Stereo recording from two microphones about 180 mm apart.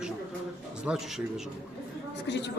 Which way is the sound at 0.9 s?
Centre (ahead or behind).